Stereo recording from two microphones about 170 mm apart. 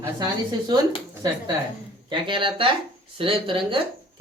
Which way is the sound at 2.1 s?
30° right (ahead or behind).